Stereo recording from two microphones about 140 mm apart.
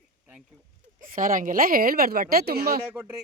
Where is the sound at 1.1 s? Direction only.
75° right (ahead or behind); by 2.8 s 90° right.